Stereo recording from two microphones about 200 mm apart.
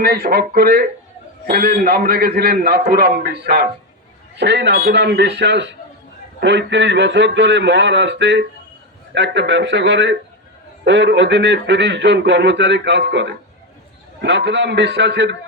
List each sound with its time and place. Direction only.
0.0 s a man's voice: 50° right (ahead or behind)